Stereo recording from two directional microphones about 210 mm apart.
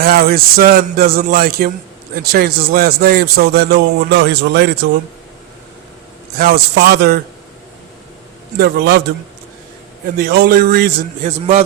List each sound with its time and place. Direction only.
0.0 s a man's voice: 45° right (ahead or behind)
6.4 s a man's voice: 45° right (ahead or behind)
8.5 s a man's voice: 45° right (ahead or behind)
10.2 s a man's voice: 45° right (ahead or behind)